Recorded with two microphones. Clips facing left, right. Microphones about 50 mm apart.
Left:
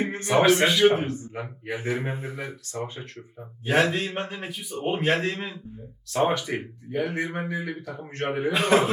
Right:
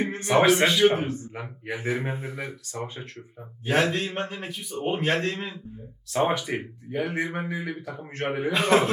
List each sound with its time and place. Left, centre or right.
0.3 s a man's voice: centre
1.6 s speech: centre
2.0 s a man's voice: centre
2.7 s speech: centre
3.9 s a man's voice: centre
6.1 s a man's voice: centre